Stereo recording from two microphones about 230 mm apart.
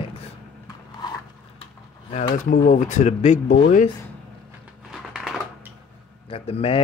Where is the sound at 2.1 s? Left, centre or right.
Left.